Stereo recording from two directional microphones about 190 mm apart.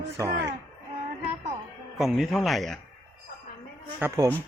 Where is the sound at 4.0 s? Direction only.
15° right (ahead or behind).